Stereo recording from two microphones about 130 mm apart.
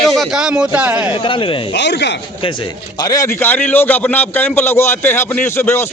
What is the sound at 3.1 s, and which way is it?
Speech, 25° left (ahead or behind).